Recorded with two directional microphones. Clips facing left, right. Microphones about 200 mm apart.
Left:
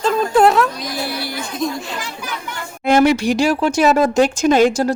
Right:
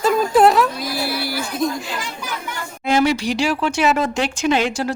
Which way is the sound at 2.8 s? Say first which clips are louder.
Left 4 dB; 55° left (ahead or behind).